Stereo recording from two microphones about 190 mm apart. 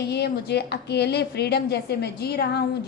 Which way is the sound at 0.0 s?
60° left (ahead or behind).